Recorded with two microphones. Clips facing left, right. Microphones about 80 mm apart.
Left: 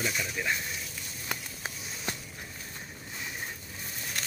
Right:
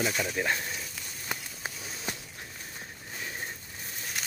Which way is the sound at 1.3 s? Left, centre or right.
Centre.